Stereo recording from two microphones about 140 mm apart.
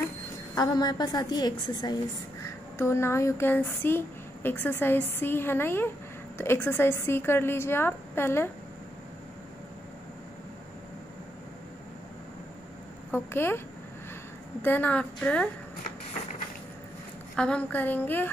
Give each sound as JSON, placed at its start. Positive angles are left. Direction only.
{"t": 0.6, "sound": "a woman's voice", "side_deg": 30}
{"t": 2.8, "sound": "speech", "side_deg": 20}
{"t": 13.1, "sound": "speech", "side_deg": 15}
{"t": 14.6, "sound": "speech", "side_deg": 10}
{"t": 17.4, "sound": "speech", "side_deg": 10}